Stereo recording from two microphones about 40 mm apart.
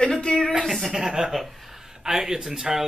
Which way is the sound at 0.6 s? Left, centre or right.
Centre.